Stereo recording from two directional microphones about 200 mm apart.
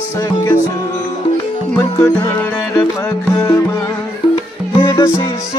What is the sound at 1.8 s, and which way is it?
Music, 15° left (ahead or behind).